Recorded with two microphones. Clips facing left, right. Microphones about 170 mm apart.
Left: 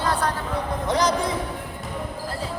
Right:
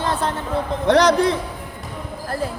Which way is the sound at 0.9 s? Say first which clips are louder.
Right 8 dB; 70° right (ahead or behind).